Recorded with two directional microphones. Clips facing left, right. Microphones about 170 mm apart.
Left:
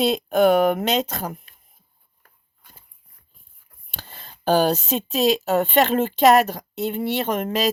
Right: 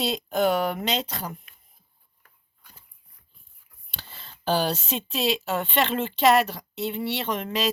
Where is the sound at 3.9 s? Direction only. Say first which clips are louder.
Left 3 dB; 50° left (ahead or behind).